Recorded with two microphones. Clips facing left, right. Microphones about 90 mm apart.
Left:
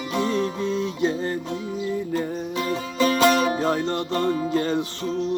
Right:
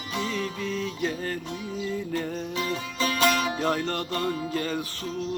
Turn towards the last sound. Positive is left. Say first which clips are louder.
# left 6 dB
turn(degrees=30)  # may be behind; listen again after turning